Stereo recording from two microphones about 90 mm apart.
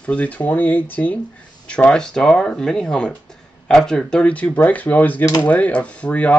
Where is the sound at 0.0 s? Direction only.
15° left (ahead or behind).